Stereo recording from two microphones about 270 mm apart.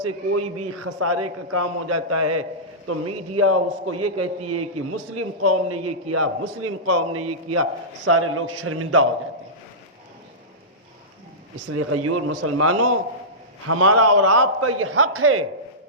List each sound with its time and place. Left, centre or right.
0.3 s a man's voice: right
11.7 s a man's voice: right